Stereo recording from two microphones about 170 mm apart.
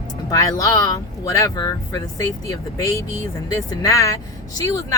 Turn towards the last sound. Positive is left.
turn(degrees=20)  # may be behind; listen again after turning